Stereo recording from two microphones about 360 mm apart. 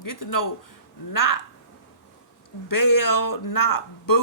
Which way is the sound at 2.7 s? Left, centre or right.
Left.